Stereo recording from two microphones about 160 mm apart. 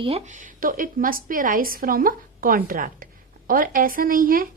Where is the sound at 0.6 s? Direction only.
60° right (ahead or behind).